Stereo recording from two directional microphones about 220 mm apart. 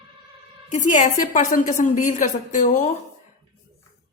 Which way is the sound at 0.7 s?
35° left (ahead or behind).